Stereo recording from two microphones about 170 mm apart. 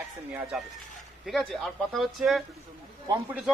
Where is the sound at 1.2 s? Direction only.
Centre (ahead or behind).